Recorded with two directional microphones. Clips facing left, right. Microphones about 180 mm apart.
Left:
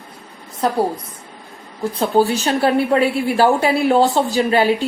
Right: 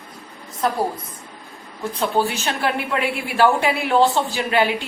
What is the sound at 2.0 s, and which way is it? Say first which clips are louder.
A woman's voice: left 5 dB; 35° left (ahead or behind).